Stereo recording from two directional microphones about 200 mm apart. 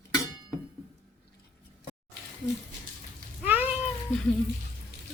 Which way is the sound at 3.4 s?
10° right (ahead or behind).